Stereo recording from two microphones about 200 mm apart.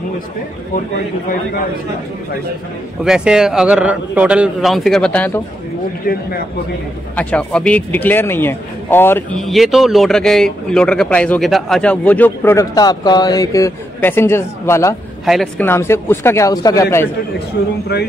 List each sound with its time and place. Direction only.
3.0 s a man's voice: 5° right (ahead or behind)
7.2 s speech: 5° left (ahead or behind)
15.2 s speech: centre (ahead or behind)
17.6 s speech: 60° left (ahead or behind)